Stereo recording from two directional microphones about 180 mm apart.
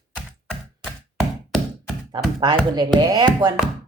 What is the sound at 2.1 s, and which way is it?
Tap, 25° right (ahead or behind).